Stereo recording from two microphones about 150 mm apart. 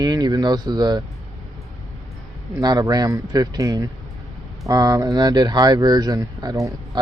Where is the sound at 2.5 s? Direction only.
25° right (ahead or behind).